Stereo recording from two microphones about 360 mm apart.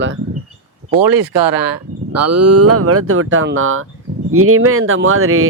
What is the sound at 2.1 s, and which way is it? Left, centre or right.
Speech, right.